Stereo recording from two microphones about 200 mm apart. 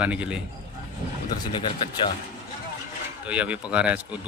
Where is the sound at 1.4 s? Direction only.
25° left (ahead or behind).